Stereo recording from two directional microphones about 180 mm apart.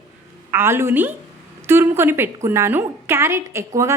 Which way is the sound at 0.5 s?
15° right (ahead or behind).